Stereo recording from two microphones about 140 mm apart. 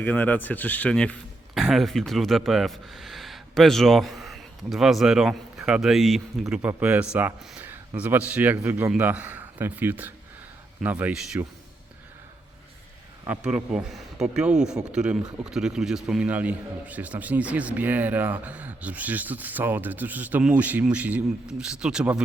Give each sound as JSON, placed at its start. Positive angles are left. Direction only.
{"t": 0.0, "sound": "speech", "side_deg": 10}
{"t": 13.2, "sound": "speech", "side_deg": -10}